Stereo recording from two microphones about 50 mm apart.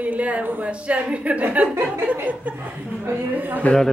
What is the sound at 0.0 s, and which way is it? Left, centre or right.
A woman's voice, right.